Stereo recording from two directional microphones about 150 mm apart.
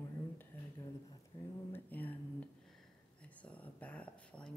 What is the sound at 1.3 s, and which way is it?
Speech, 25° left (ahead or behind).